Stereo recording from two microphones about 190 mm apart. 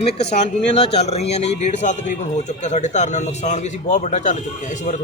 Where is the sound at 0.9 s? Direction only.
35° left (ahead or behind).